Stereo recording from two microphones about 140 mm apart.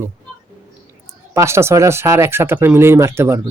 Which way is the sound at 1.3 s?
20° right (ahead or behind).